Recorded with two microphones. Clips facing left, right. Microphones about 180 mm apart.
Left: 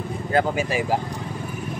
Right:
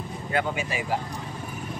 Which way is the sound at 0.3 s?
35° left (ahead or behind).